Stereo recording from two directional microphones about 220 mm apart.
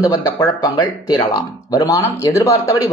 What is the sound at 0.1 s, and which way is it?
Speech, 15° left (ahead or behind).